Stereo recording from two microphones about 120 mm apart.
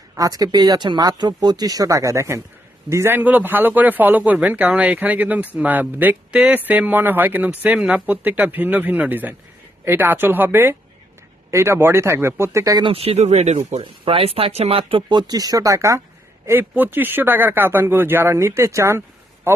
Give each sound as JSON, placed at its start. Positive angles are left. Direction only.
{"t": 0.2, "sound": "speech", "side_deg": -30}
{"t": 12.8, "sound": "speech", "side_deg": -55}
{"t": 13.8, "sound": "speech", "side_deg": -50}
{"t": 15.3, "sound": "speech", "side_deg": -30}